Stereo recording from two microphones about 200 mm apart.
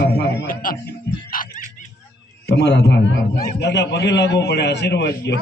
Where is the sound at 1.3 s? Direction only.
45° left (ahead or behind).